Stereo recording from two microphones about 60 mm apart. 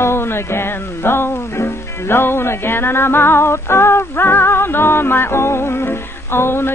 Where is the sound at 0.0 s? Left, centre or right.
Left.